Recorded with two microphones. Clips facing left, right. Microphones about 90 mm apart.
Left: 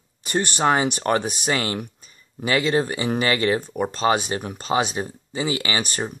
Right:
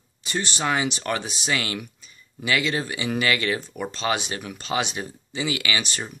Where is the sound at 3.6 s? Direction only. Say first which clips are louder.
Left 6 dB; 45° left (ahead or behind).